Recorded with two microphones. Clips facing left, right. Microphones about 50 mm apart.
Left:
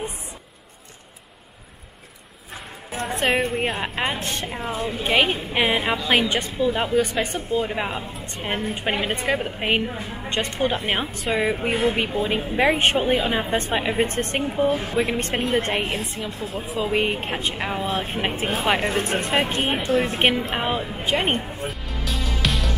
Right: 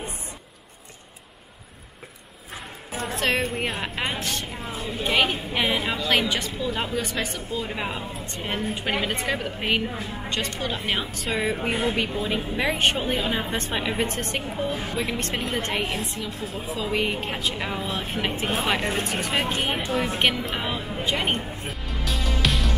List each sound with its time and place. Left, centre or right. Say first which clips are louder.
2.9 s a sound: left 3 dB; centre
3.2 s speech: left 3 dB; centre
4.2 s a woman's voice: left 2 dB; left
7.6 s a woman's voice: left 3 dB; centre; by 10.8 s left
11.3 s a woman's voice: left 3 dB; centre
12.5 s a woman's voice: left 5 dB; left
14.1 s a woman's voice: left 4 dB; left
14.7 s speech: left 6 dB; centre
15.0 s a woman's voice: left 5 dB; left
19.5 s speech: left 3 dB; centre
19.9 s a woman's voice: left 4 dB; centre
21.6 s music: left 1 dB; centre